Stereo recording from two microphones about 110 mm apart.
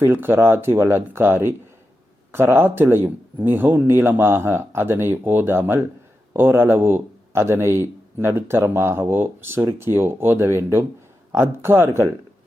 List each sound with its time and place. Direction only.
0.0 s a man's voice: 20° right (ahead or behind)